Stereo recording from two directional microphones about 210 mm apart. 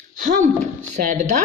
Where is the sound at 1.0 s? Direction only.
35° right (ahead or behind).